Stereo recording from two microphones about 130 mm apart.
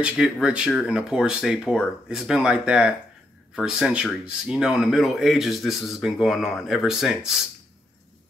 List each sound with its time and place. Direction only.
0.0 s speech: 5° right (ahead or behind)